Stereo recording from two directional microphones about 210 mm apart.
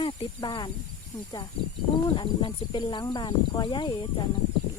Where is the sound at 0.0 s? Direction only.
20° left (ahead or behind).